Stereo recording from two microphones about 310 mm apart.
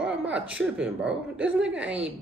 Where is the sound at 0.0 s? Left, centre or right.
Centre.